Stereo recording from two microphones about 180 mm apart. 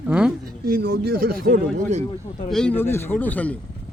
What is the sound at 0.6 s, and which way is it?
Speech, 55° right (ahead or behind).